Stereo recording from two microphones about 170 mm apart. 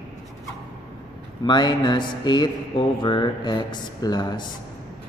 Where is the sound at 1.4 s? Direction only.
25° left (ahead or behind).